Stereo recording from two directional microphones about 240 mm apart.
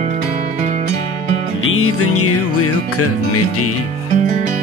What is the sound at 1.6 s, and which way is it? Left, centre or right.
Music, left.